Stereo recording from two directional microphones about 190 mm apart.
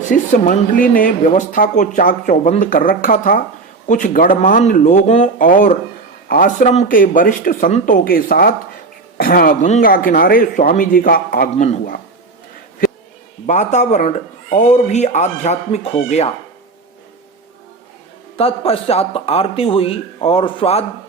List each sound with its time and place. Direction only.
0.1 s speech: 40° left (ahead or behind)
11.5 s speech: 35° left (ahead or behind)
13.5 s speech: 40° left (ahead or behind)
18.3 s speech: 30° left (ahead or behind)